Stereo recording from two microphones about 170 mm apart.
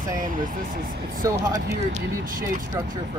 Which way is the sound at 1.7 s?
50° right (ahead or behind).